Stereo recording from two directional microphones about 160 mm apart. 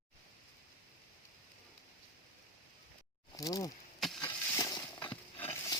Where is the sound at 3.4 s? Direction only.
20° left (ahead or behind).